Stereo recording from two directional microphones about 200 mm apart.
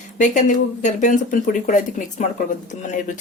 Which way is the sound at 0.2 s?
40° left (ahead or behind).